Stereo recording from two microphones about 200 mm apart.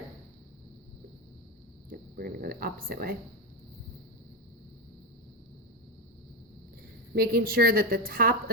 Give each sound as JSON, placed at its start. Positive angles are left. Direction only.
{"t": 1.9, "sound": "speech", "side_deg": -50}
{"t": 7.1, "sound": "a woman's voice", "side_deg": -50}